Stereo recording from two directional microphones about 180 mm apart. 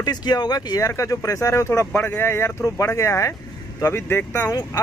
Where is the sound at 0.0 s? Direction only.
25° left (ahead or behind).